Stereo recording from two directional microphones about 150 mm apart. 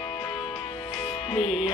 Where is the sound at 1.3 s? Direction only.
40° left (ahead or behind).